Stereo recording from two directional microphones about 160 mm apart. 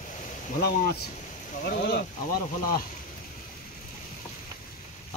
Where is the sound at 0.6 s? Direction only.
75° left (ahead or behind).